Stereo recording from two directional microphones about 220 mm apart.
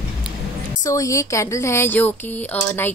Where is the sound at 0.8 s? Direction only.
15° left (ahead or behind).